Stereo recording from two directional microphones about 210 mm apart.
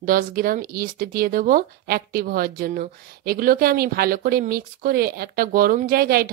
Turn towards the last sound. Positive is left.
turn(degrees=-45)  # may be behind; listen again after turning